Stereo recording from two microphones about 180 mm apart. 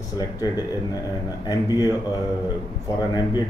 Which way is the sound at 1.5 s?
20° left (ahead or behind).